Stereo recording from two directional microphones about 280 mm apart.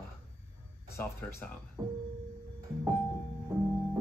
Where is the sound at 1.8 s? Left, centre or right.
Centre.